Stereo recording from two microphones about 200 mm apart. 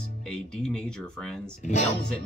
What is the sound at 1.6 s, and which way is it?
Speech, 40° left (ahead or behind).